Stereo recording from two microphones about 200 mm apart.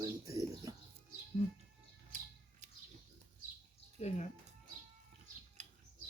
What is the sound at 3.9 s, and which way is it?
Speech, 35° left (ahead or behind).